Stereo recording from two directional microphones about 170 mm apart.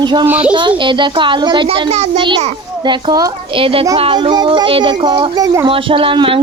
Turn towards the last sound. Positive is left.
turn(degrees=-30)  # may be behind; listen again after turning